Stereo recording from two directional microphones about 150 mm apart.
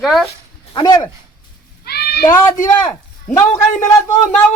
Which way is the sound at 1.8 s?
90° left.